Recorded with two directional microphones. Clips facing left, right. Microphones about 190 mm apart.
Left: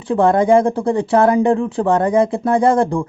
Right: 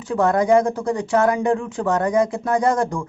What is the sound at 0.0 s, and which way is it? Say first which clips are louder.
Speech: left 4 dB; 30° left (ahead or behind).